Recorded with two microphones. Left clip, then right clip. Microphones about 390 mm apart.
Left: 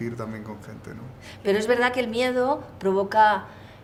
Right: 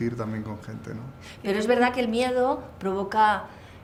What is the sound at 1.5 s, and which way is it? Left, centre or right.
A woman's voice, centre.